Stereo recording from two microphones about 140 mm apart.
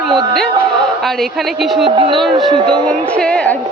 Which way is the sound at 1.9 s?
40° right (ahead or behind).